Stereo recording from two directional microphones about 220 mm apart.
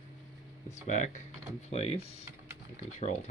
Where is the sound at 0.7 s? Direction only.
35° left (ahead or behind).